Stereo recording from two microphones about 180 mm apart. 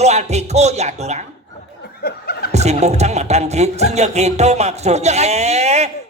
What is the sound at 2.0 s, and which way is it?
Laughter, 60° left (ahead or behind).